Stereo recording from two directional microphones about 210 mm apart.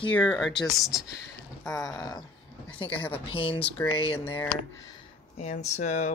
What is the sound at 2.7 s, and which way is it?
Speech, 25° left (ahead or behind).